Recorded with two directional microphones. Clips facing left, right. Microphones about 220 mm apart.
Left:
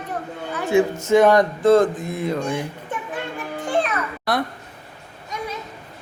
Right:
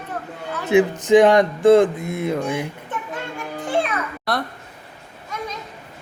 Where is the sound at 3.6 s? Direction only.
5° right (ahead or behind).